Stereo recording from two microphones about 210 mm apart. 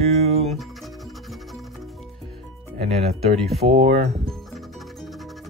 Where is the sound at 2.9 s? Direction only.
30° right (ahead or behind).